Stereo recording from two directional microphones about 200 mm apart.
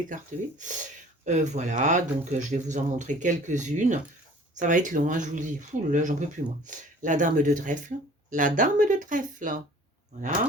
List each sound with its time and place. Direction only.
0.6 s speech: 40° right (ahead or behind)